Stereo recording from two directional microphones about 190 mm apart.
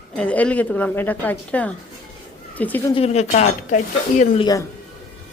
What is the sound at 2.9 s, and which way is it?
Speech, 35° left (ahead or behind).